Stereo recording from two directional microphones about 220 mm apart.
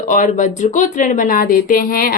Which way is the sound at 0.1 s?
35° left (ahead or behind).